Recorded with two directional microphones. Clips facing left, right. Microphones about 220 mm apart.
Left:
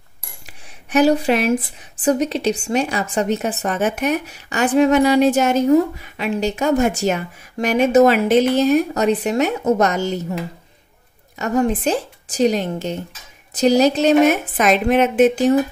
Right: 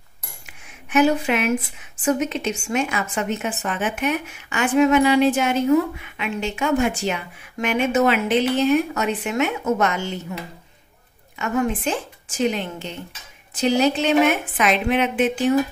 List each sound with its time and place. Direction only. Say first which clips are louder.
0.5 s speech: left 4 dB; 35° left (ahead or behind)
11.3 s speech: left 4 dB; 40° left (ahead or behind)